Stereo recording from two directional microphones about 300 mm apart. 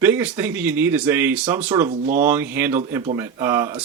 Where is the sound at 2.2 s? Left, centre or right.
Centre.